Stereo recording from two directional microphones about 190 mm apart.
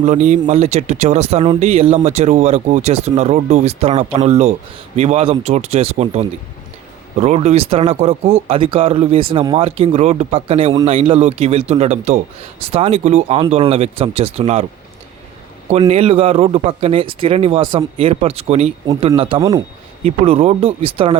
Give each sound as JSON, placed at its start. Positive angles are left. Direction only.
{"t": 0.0, "sound": "speech", "side_deg": -35}
{"t": 15.9, "sound": "speech", "side_deg": -30}